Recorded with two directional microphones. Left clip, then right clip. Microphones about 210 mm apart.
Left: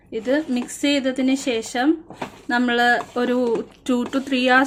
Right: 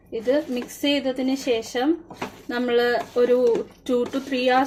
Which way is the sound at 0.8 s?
35° left (ahead or behind).